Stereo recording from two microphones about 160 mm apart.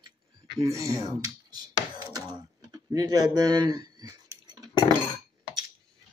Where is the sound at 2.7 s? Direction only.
20° right (ahead or behind).